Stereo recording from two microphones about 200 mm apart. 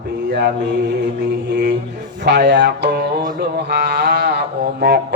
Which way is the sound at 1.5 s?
60° right (ahead or behind).